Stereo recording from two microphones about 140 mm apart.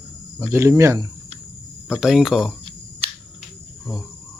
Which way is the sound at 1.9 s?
5° right (ahead or behind).